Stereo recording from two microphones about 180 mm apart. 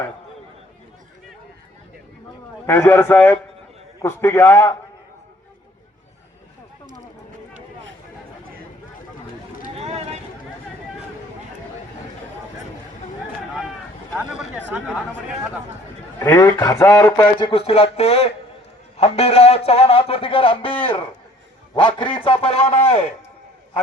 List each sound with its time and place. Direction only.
2.6 s a man's voice: 15° left (ahead or behind)
9.7 s a sound: 35° right (ahead or behind)
14.2 s speech: 5° right (ahead or behind)
16.1 s a man's voice: 15° left (ahead or behind)
17.5 s a man's voice: 35° left (ahead or behind)